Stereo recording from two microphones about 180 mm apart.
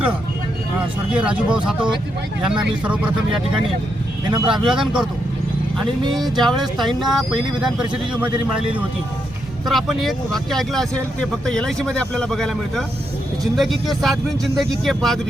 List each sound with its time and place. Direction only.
1.1 s speech: 5° right (ahead or behind)
2.8 s speech: 5° right (ahead or behind)
4.3 s speech: 25° right (ahead or behind)
4.6 s speech: 5° right (ahead or behind)
6.1 s speech: centre (ahead or behind)